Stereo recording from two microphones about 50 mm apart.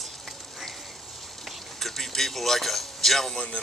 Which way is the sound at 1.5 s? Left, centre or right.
Centre.